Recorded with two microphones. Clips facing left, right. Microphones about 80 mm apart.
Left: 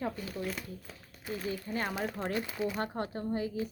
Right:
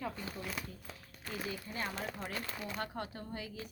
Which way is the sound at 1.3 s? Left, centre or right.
Centre.